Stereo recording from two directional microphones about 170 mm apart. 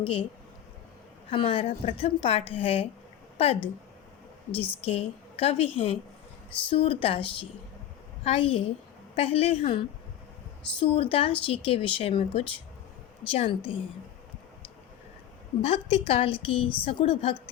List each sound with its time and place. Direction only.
0.0 s speech: 30° left (ahead or behind)
1.3 s speech: 30° left (ahead or behind)
4.8 s speech: 35° left (ahead or behind)
15.6 s speech: 35° left (ahead or behind)